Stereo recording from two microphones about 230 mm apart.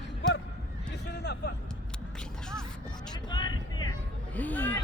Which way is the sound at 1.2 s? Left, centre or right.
Left.